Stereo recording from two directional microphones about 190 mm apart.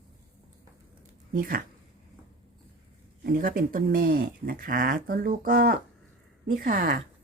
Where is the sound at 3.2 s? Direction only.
50° right (ahead or behind).